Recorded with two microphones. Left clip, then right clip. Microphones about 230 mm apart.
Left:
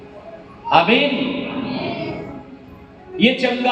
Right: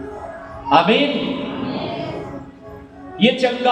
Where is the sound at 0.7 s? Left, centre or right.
Right.